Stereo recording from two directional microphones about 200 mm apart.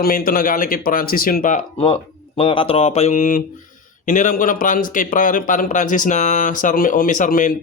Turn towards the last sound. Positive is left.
turn(degrees=45)  # may be behind; listen again after turning